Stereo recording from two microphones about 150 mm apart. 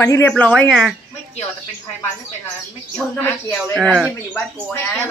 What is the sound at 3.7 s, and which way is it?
Speech, centre (ahead or behind).